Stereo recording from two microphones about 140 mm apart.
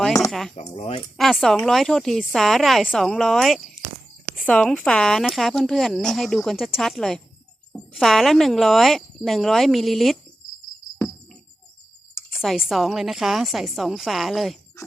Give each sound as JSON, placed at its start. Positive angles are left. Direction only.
{"t": 0.3, "sound": "a sound", "side_deg": 0}
{"t": 0.5, "sound": "speech", "side_deg": 50}
{"t": 1.1, "sound": "a woman's voice", "side_deg": 0}
{"t": 12.3, "sound": "a woman's voice", "side_deg": 0}